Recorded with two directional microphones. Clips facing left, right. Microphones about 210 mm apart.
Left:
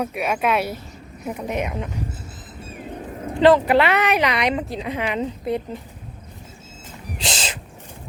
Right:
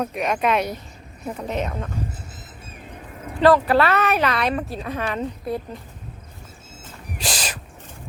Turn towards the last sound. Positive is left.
turn(degrees=25)  # may be behind; listen again after turning